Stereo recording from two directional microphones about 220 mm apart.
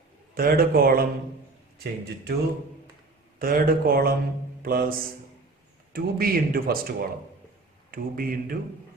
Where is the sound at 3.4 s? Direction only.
40° right (ahead or behind).